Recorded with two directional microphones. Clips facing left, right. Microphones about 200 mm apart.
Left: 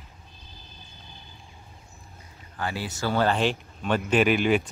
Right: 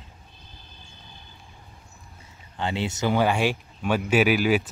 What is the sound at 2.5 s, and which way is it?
Speech, 25° right (ahead or behind).